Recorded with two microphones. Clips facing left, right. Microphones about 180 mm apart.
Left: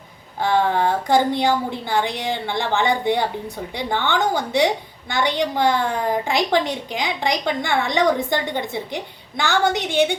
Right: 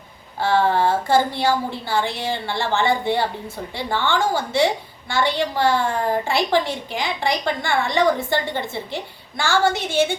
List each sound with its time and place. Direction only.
0.4 s a woman's voice: 15° left (ahead or behind)